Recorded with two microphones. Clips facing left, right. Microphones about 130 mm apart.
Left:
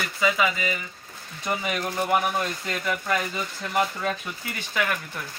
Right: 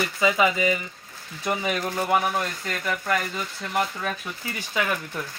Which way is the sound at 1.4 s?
Centre (ahead or behind).